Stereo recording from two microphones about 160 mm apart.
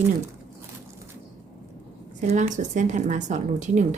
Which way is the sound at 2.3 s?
50° right (ahead or behind).